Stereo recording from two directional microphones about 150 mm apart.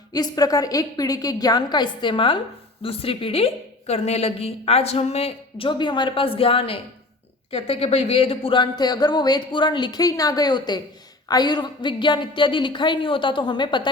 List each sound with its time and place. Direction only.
0.1 s a woman's voice: 25° left (ahead or behind)